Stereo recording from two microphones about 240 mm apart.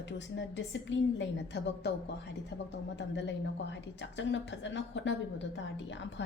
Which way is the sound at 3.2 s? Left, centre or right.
Left.